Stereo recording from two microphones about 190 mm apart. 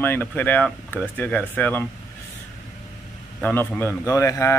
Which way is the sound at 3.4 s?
10° left (ahead or behind).